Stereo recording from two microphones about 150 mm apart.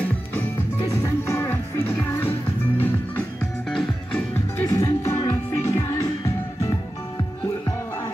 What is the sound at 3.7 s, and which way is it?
Music, 10° left (ahead or behind).